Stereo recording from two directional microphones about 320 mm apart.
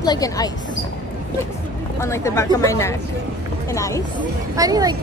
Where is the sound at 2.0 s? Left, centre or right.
Centre.